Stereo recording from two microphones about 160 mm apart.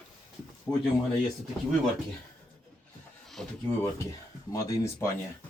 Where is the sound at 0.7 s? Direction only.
20° left (ahead or behind).